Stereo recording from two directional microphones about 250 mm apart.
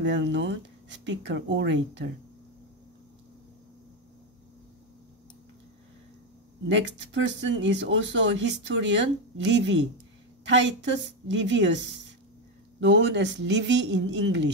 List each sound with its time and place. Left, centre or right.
0.0 s speech: right
6.7 s speech: right